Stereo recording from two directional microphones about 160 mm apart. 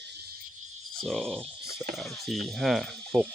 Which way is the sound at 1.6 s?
20° left (ahead or behind).